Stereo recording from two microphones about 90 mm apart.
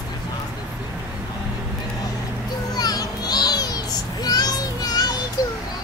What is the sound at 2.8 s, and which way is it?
Child singing, 45° left (ahead or behind).